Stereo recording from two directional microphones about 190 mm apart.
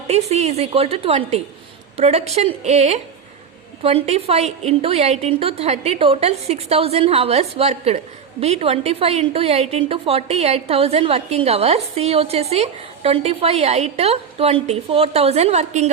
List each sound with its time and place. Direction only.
0.1 s a woman's voice: 35° right (ahead or behind)